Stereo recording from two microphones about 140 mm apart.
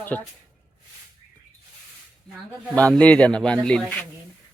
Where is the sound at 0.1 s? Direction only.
10° left (ahead or behind).